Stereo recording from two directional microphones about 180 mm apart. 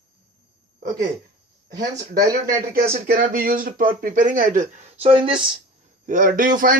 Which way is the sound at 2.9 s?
50° right (ahead or behind).